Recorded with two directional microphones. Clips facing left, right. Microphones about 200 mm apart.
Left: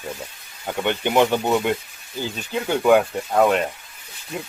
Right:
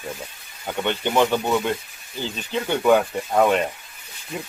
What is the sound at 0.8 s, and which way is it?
Speech, 15° left (ahead or behind).